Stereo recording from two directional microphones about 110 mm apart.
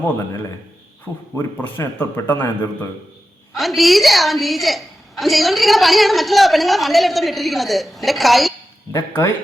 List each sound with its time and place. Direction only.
1.6 s speech: 20° left (ahead or behind)
3.5 s a woman's voice: centre (ahead or behind)
8.9 s speech: 20° left (ahead or behind)